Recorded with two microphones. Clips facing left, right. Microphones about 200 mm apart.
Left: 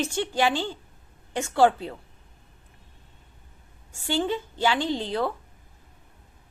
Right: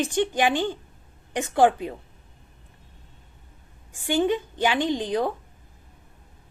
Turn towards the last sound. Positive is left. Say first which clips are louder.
# right 2 dB
turn(degrees=-15)  # may be behind; listen again after turning